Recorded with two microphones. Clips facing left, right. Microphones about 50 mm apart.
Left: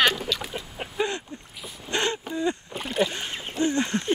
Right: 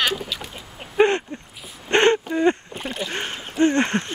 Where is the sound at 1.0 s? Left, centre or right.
Right.